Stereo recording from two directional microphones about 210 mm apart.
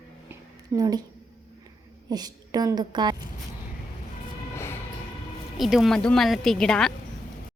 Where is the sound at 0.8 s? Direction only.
20° right (ahead or behind).